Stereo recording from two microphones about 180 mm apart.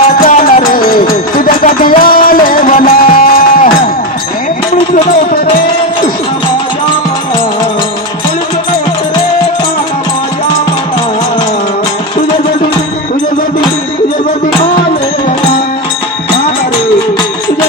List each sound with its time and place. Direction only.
0.1 s music: 50° left (ahead or behind)
5.3 s music: 50° left (ahead or behind)